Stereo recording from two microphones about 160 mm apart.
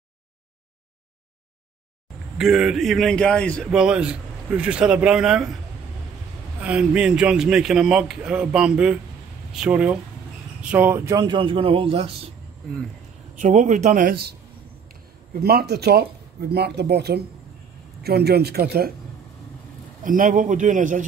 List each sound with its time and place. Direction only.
2.3 s a man's voice: centre (ahead or behind)
3.7 s a man's voice: 5° right (ahead or behind)
6.6 s a man's voice: 5° right (ahead or behind); by 12.1 s 35° right (ahead or behind)
13.4 s a man's voice: 50° right (ahead or behind); by 14.3 s 70° right (ahead or behind)
15.4 s speech: 90° right
20.0 s a man's voice: 55° right (ahead or behind)